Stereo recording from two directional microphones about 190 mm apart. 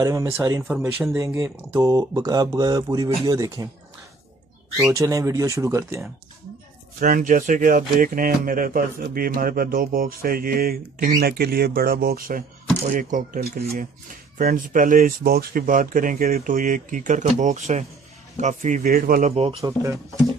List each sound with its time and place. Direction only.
0.0 s speech: 15° right (ahead or behind)
0.7 s speech: centre (ahead or behind)
1.1 s speech: 15° right (ahead or behind)
4.9 s speech: 15° right (ahead or behind)
7.0 s speech: 45° right (ahead or behind)
19.3 s speech: 30° right (ahead or behind)
19.6 s speech: 15° right (ahead or behind)